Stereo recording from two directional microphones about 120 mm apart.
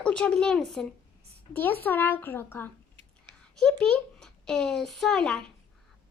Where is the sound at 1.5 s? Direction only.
15° left (ahead or behind).